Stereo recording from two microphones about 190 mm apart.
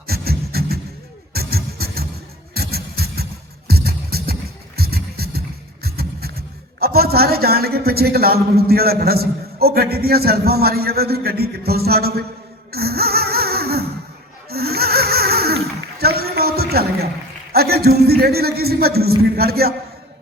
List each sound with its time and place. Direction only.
0.1 s beatboxing: 55° right (ahead or behind)
1.3 s music: 55° right (ahead or behind)
5.8 s speech: 55° right (ahead or behind)
12.7 s a sound: 55° right (ahead or behind)
17.5 s a man's voice: 55° right (ahead or behind)